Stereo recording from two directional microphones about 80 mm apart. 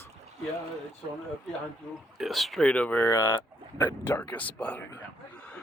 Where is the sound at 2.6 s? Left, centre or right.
Centre.